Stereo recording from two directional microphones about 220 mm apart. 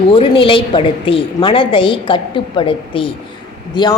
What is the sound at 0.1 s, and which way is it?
A woman's voice, 25° left (ahead or behind).